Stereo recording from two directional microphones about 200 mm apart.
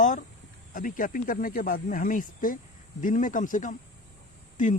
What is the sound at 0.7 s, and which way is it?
Speech, 45° left (ahead or behind).